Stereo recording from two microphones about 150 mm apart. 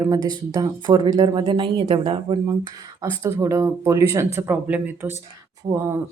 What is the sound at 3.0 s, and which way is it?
Speech, 20° right (ahead or behind).